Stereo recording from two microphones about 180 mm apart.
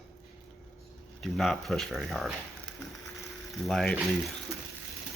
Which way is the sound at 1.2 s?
Centre (ahead or behind).